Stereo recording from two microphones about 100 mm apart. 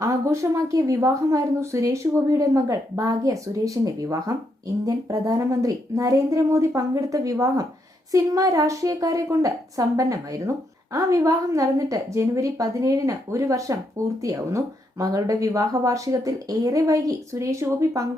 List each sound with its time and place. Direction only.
0.0 s speech: 30° right (ahead or behind)